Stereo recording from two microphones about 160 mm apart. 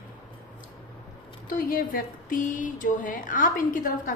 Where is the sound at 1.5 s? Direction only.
65° left (ahead or behind).